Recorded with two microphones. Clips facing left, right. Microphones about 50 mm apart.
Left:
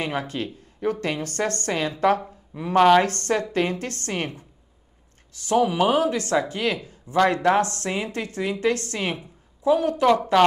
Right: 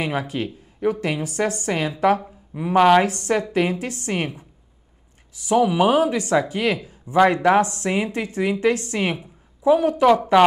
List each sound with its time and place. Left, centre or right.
0.0 s a woman's voice: centre